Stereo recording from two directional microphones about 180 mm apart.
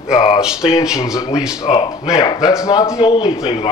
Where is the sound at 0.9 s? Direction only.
20° left (ahead or behind).